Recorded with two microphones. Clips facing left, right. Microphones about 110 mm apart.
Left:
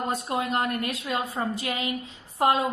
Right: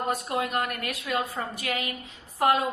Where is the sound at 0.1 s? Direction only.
30° left (ahead or behind).